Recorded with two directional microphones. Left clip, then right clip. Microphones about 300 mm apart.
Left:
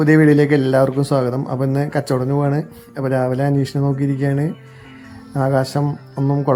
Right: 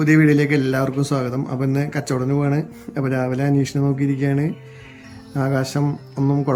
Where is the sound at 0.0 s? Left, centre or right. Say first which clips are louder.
Left 3 dB; centre.